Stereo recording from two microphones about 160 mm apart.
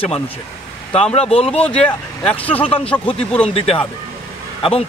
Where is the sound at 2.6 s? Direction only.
35° left (ahead or behind).